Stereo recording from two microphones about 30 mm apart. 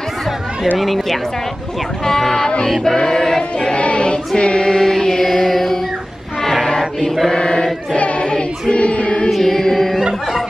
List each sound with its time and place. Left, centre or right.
0.7 s speech: centre
2.0 s speech: centre
2.3 s music: left
2.8 s choir: left
3.5 s choir: left
4.4 s music: left; by 5.8 s centre
6.8 s choir: centre
7.3 s choir: left
7.9 s choir: left
9.4 s music: centre